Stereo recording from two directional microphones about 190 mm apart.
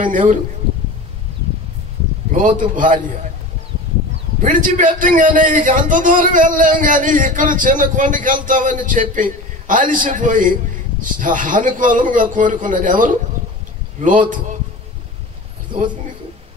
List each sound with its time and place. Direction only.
0.0 s a man's voice: 45° right (ahead or behind)
2.3 s a man's voice: 45° right (ahead or behind)
4.4 s a man's voice: 45° right (ahead or behind)